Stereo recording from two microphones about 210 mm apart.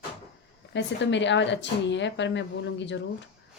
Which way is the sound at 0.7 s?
60° left (ahead or behind).